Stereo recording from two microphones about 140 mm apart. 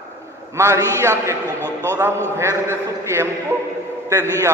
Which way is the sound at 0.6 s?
20° right (ahead or behind).